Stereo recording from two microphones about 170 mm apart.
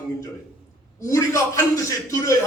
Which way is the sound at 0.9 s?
20° left (ahead or behind).